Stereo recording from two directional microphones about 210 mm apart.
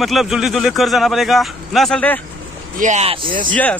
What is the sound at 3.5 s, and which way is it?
Speech, 5° left (ahead or behind).